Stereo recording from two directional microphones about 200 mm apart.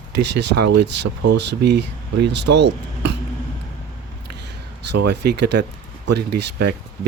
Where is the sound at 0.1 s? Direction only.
60° right (ahead or behind).